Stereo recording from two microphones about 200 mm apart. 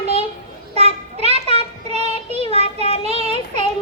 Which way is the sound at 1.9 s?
30° right (ahead or behind).